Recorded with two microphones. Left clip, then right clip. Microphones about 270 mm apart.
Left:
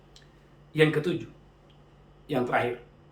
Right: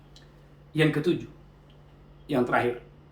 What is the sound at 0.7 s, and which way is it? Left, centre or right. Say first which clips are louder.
Speech: left 1 dB; centre.